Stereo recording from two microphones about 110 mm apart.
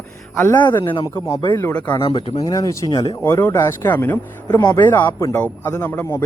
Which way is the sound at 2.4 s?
30° left (ahead or behind).